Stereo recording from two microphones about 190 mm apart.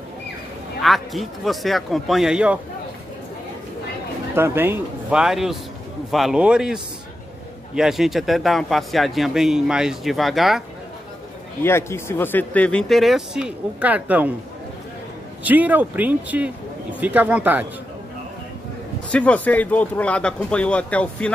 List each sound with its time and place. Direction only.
0.8 s speech: centre (ahead or behind)
4.4 s speech: 10° right (ahead or behind)
11.6 s speech: 15° left (ahead or behind); by 14.3 s 10° right (ahead or behind)
15.4 s speech: 10° right (ahead or behind)
19.1 s speech: 5° left (ahead or behind)